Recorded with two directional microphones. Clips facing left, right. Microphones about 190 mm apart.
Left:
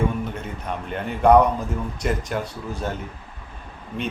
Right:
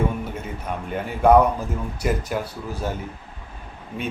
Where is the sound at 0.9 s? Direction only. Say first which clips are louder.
Even; 5° right (ahead or behind).